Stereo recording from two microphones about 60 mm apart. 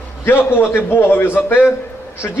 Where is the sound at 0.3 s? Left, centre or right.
Left.